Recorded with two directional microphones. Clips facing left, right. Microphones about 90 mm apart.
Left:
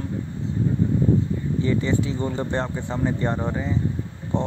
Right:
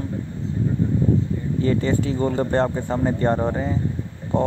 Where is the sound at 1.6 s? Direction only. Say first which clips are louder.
Right 2 dB; 45° right (ahead or behind).